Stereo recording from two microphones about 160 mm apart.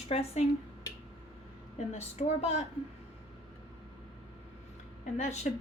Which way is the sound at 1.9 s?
40° left (ahead or behind).